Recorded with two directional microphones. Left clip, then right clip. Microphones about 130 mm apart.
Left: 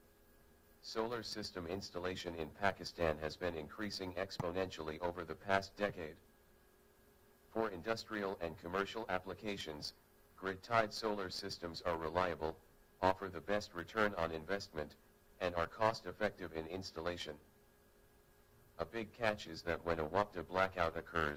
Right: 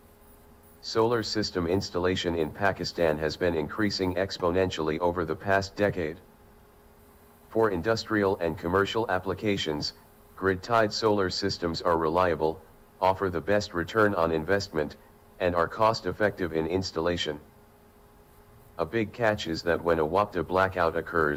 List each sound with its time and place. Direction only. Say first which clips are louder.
0.8 s speech: right 16 dB; 50° right (ahead or behind)
7.5 s speech: right 14 dB; 50° right (ahead or behind)
18.8 s speech: right 13 dB; 45° right (ahead or behind)